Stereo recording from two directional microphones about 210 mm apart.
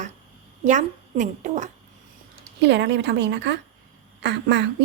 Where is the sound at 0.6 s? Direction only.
35° right (ahead or behind).